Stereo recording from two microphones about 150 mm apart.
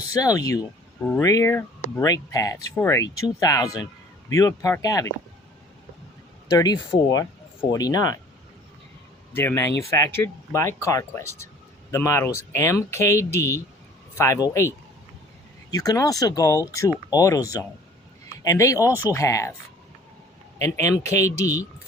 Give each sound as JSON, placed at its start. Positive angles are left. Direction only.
{"t": 0.1, "sound": "speech", "side_deg": 25}
{"t": 6.5, "sound": "speech", "side_deg": 25}
{"t": 9.3, "sound": "speech", "side_deg": 15}
{"t": 15.7, "sound": "speech", "side_deg": 25}
{"t": 20.6, "sound": "speech", "side_deg": 20}